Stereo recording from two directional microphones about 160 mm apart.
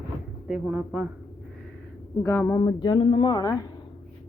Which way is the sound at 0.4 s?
5° right (ahead or behind).